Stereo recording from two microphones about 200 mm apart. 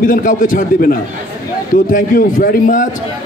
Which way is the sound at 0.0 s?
40° left (ahead or behind).